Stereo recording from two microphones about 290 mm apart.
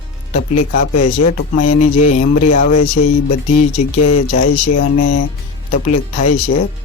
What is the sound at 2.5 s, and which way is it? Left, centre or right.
Speech, left.